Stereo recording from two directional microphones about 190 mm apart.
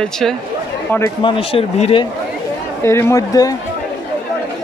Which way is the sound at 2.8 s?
15° left (ahead or behind).